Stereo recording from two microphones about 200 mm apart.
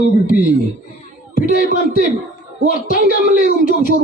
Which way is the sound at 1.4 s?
45° left (ahead or behind).